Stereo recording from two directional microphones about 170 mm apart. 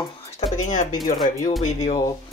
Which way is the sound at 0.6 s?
45° left (ahead or behind).